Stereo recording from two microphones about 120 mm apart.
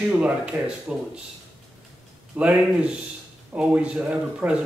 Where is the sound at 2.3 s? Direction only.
10° right (ahead or behind).